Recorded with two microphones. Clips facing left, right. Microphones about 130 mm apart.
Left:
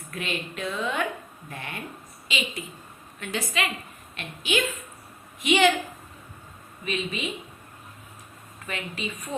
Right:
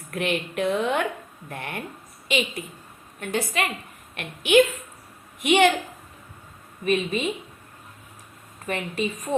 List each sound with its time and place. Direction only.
0.1 s a woman's voice: 60° right (ahead or behind)
6.8 s a woman's voice: 45° right (ahead or behind)
8.6 s a woman's voice: 40° right (ahead or behind)